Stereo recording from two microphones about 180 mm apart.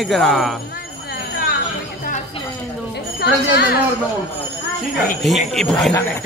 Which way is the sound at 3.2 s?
60° left (ahead or behind).